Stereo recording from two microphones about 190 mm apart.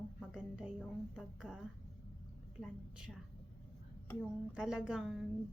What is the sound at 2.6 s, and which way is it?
Speech, 5° right (ahead or behind).